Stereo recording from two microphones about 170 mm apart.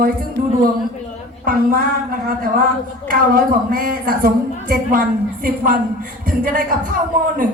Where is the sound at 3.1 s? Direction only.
55° right (ahead or behind).